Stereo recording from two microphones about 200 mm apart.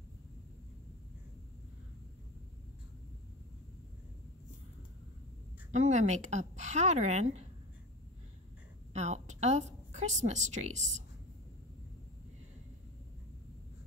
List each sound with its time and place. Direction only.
5.7 s a woman's voice: 35° right (ahead or behind)
8.9 s a woman's voice: 35° right (ahead or behind)